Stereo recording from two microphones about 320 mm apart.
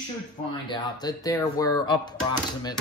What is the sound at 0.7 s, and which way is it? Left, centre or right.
Speech, centre.